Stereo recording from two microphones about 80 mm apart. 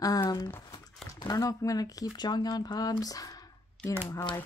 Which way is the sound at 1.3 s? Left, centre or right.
Left.